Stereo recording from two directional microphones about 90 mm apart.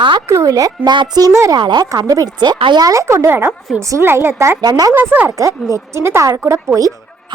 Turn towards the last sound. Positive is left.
turn(degrees=-25)  # may be behind; listen again after turning